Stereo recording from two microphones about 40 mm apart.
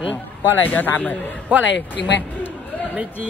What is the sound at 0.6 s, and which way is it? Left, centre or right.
Speech, left.